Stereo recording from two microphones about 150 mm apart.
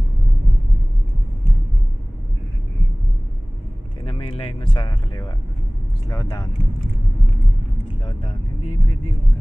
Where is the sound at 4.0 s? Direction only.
35° left (ahead or behind).